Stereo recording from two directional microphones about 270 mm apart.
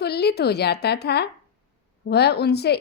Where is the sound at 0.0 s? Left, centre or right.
Left.